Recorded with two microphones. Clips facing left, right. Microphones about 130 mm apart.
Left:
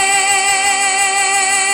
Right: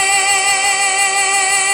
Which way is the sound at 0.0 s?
30° right (ahead or behind).